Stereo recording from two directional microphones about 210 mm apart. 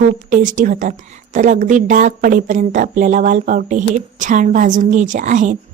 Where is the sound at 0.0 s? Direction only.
40° right (ahead or behind).